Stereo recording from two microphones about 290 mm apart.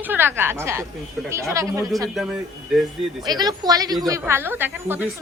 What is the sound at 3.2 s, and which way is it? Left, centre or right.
Speech, centre.